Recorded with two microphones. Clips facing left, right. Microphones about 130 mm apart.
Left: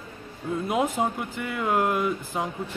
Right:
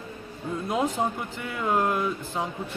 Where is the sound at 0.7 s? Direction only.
5° left (ahead or behind).